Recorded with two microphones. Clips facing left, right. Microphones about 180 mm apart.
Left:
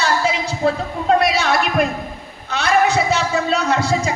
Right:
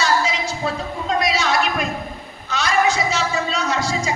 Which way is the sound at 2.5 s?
60° left (ahead or behind).